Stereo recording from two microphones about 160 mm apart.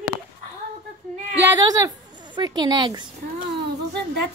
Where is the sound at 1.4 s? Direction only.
20° right (ahead or behind).